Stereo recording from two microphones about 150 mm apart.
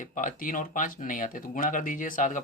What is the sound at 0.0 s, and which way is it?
Speech, 60° left (ahead or behind).